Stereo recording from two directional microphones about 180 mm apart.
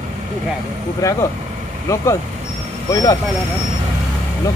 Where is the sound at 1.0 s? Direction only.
20° left (ahead or behind).